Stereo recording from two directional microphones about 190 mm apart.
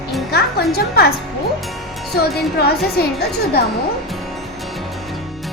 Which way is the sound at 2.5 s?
55° left (ahead or behind).